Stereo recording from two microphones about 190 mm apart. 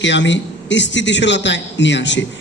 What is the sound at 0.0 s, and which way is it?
A man's voice, 70° left (ahead or behind).